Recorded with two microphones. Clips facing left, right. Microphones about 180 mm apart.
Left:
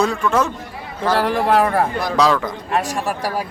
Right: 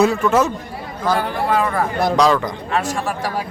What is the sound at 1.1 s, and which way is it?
Speech, 80° left.